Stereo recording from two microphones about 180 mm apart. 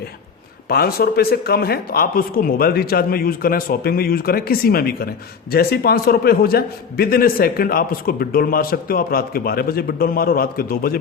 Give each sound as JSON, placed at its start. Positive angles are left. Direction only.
{"t": 0.7, "sound": "speech", "side_deg": 60}